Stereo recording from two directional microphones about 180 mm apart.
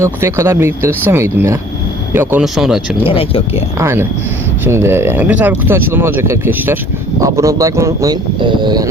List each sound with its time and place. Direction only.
0.0 s speech: 15° right (ahead or behind)
2.4 s speech: centre (ahead or behind)
3.1 s speech: 30° left (ahead or behind)
3.8 s speech: 15° right (ahead or behind)